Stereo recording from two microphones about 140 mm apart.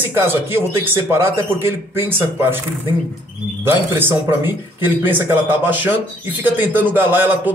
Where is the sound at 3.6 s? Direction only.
15° right (ahead or behind).